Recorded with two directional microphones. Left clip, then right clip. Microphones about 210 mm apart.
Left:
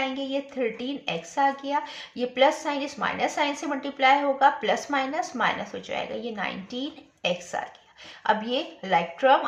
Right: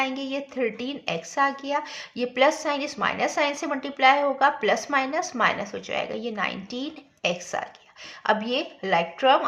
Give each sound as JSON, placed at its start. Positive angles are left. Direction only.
{"t": 0.0, "sound": "a woman's voice", "side_deg": -35}